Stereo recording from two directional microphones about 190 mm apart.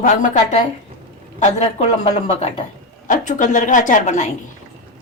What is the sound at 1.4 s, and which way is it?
A woman's voice, 35° left (ahead or behind).